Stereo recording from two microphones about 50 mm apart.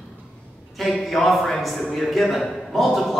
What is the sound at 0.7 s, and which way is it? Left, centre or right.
Speech, centre.